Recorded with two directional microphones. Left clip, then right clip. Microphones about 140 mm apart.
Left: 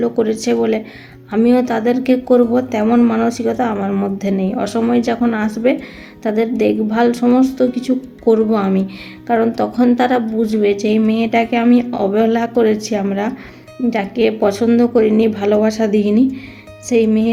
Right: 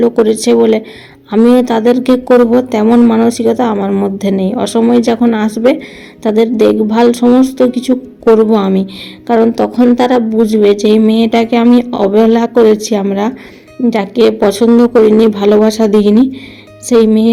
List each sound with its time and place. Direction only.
0.0 s speech: 30° right (ahead or behind)